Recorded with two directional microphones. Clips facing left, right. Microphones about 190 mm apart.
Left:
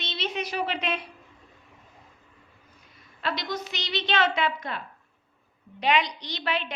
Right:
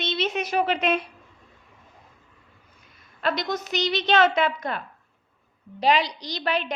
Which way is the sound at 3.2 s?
45° right (ahead or behind).